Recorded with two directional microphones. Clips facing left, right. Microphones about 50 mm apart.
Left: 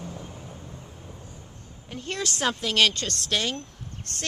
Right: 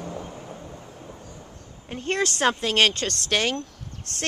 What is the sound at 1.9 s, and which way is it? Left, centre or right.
Speech, right.